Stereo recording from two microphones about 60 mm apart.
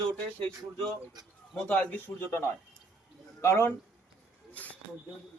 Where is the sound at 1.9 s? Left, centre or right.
Left.